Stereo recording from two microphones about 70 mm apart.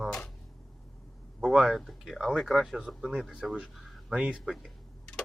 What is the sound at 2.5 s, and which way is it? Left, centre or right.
Speech, centre.